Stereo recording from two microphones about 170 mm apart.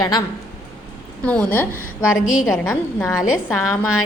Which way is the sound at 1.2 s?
10° left (ahead or behind).